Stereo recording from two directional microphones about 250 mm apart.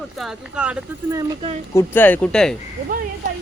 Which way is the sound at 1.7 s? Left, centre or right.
Centre.